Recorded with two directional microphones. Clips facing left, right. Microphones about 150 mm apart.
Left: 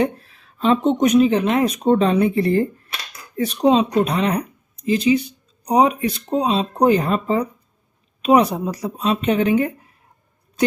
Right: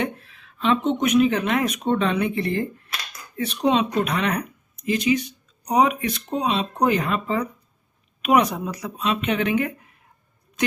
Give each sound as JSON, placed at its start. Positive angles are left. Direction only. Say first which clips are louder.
{"t": 0.0, "sound": "speech", "louder": "left 6 dB", "side_deg": 35}